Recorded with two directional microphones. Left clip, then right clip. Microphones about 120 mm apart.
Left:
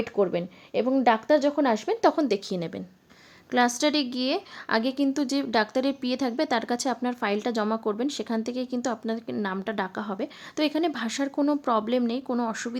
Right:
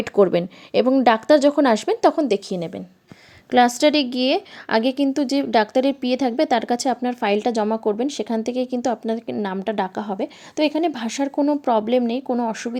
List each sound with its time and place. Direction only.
0.0 s speech: 45° right (ahead or behind)
2.0 s speech: 20° right (ahead or behind)
3.5 s a woman's voice: 30° right (ahead or behind)